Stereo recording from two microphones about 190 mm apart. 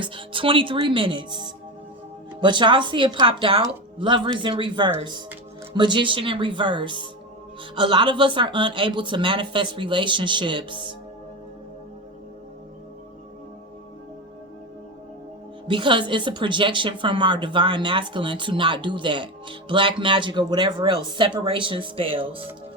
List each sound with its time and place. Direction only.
0.0 s a woman's voice: 25° right (ahead or behind)
15.6 s a woman's voice: 25° right (ahead or behind)